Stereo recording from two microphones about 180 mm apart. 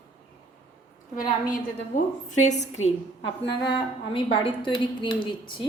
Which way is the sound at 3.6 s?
30° left (ahead or behind).